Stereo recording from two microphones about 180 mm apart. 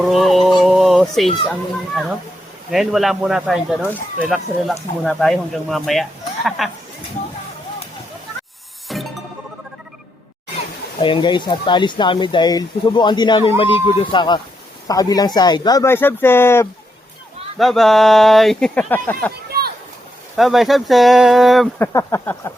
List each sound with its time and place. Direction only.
0.0 s a sound: centre (ahead or behind)
2.6 s speech: centre (ahead or behind)
8.9 s music: centre (ahead or behind)
11.0 s speech: 25° left (ahead or behind)
17.6 s speech: centre (ahead or behind)
20.3 s speech: centre (ahead or behind)
21.8 s speech: 15° left (ahead or behind)